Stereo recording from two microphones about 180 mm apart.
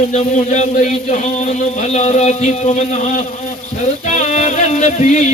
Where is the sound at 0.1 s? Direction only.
40° left (ahead or behind).